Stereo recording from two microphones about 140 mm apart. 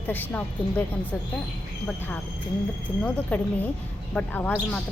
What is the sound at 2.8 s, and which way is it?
A woman's voice, 10° left (ahead or behind).